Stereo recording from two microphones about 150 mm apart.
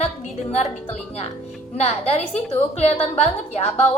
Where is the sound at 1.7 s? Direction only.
45° left (ahead or behind).